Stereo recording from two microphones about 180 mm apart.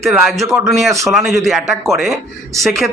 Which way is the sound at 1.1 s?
Centre (ahead or behind).